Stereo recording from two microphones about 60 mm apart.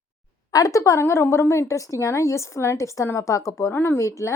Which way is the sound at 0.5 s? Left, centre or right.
Left.